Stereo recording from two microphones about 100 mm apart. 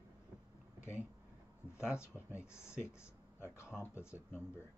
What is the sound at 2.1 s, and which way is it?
Speech, 20° right (ahead or behind).